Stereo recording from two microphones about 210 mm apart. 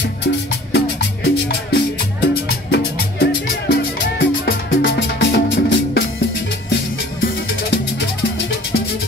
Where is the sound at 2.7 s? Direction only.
55° left (ahead or behind).